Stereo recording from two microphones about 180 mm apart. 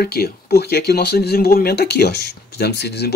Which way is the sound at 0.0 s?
60° left (ahead or behind).